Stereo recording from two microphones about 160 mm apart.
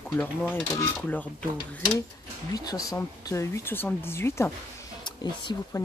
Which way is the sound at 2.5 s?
25° left (ahead or behind).